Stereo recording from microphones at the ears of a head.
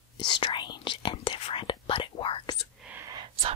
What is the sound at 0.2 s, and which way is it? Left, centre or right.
Whispering, left.